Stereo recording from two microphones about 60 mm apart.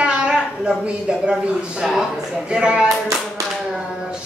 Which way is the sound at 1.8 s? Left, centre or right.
Centre.